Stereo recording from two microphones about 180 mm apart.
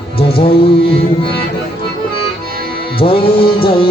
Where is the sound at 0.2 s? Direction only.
30° left (ahead or behind).